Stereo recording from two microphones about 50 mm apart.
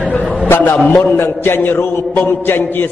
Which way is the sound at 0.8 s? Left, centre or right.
Left.